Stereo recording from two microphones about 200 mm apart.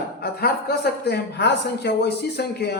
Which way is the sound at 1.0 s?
55° left (ahead or behind).